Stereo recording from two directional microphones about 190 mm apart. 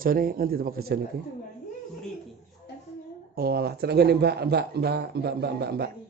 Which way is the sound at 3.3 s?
55° right (ahead or behind).